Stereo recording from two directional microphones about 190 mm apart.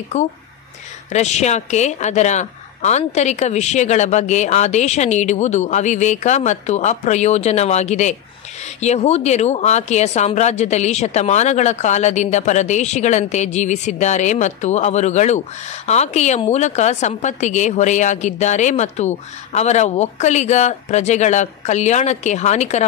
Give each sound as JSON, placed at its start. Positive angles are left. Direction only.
{"t": 0.1, "sound": "a woman's voice", "side_deg": 40}